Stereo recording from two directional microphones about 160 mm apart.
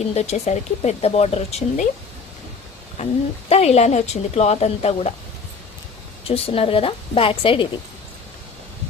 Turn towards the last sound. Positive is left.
turn(degrees=35)  # may be behind; listen again after turning